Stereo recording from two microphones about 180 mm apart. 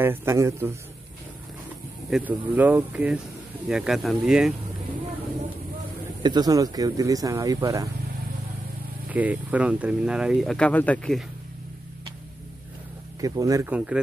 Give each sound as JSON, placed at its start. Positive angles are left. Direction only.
{"t": 0.0, "sound": "speech", "side_deg": -10}
{"t": 2.0, "sound": "speech", "side_deg": -5}
{"t": 6.2, "sound": "speech", "side_deg": -20}
{"t": 9.1, "sound": "speech", "side_deg": -10}
{"t": 13.2, "sound": "speech", "side_deg": -20}
{"t": 13.7, "sound": "speech", "side_deg": -5}